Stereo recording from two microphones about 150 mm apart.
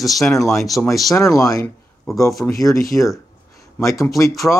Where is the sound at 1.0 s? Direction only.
25° left (ahead or behind).